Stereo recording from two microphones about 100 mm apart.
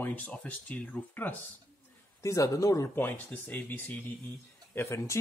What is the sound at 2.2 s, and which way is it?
Speech, 30° left (ahead or behind).